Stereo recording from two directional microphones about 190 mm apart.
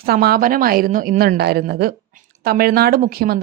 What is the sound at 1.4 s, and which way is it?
A woman's voice, 60° right (ahead or behind).